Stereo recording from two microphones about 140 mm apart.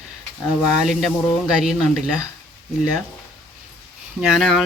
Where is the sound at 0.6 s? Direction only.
5° right (ahead or behind).